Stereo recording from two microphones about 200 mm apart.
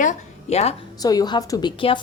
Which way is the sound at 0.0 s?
35° left (ahead or behind).